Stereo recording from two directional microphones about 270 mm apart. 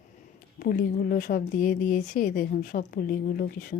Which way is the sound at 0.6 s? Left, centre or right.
Left.